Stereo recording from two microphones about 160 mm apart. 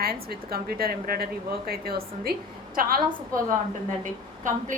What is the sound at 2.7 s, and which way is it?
Speech, 65° right (ahead or behind).